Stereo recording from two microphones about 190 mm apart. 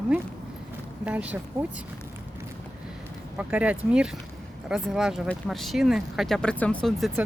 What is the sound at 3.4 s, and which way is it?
Speech, 5° right (ahead or behind).